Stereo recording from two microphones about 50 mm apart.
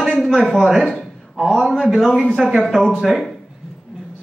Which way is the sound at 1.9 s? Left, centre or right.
Centre.